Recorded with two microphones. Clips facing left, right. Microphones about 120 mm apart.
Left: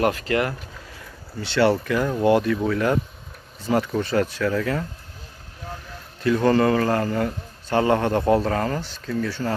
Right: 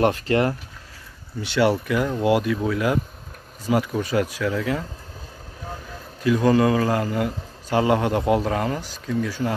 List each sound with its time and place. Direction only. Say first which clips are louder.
0.0 s speech: right 2 dB; 30° right (ahead or behind)
1.4 s a man's voice: left 1 dB; 10° right (ahead or behind)
6.2 s a man's voice: even; 10° right (ahead or behind)